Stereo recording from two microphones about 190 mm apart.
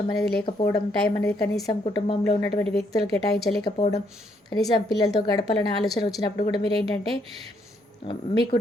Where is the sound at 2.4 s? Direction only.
10° left (ahead or behind).